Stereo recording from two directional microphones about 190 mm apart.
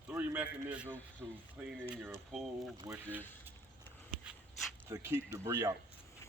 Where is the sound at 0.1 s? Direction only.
10° right (ahead or behind).